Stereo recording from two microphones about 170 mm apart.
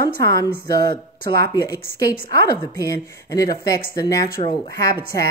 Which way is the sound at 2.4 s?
20° left (ahead or behind).